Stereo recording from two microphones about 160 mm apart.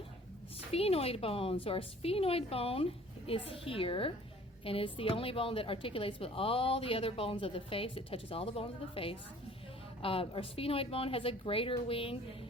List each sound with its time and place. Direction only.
0.7 s a woman's voice: 40° left (ahead or behind)